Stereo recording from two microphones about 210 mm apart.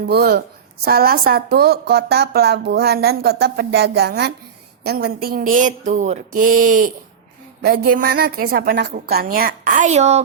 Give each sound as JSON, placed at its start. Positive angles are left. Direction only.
{"t": 0.0, "sound": "a woman's voice", "side_deg": -50}